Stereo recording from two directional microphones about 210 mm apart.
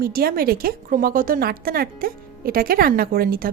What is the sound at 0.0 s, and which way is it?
A woman's voice, 45° right (ahead or behind).